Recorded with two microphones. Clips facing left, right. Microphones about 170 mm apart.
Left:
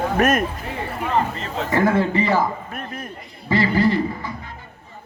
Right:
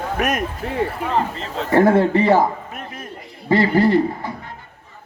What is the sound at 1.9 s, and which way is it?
Speech, 60° right (ahead or behind).